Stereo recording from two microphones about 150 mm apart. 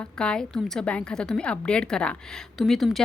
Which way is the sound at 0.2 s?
5° left (ahead or behind).